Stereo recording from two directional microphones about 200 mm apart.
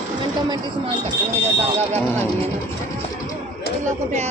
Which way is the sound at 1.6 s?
30° right (ahead or behind).